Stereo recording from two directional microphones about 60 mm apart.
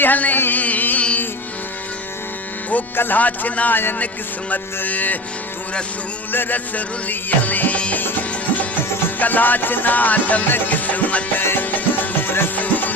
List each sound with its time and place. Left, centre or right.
0.0 s carnatic music: left
2.6 s music: left
6.3 s music: left